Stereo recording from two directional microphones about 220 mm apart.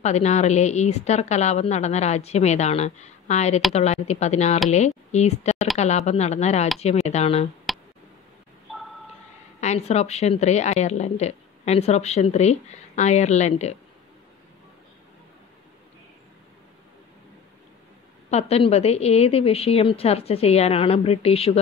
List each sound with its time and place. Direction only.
0.0 s a woman's voice: 30° left (ahead or behind)
7.7 s tick: centre (ahead or behind)
9.6 s a woman's voice: 30° left (ahead or behind)
18.3 s a woman's voice: 30° left (ahead or behind)